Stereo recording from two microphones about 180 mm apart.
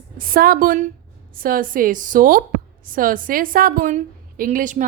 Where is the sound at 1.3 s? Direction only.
50° right (ahead or behind).